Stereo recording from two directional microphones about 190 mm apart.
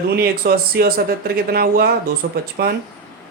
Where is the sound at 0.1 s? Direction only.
55° right (ahead or behind).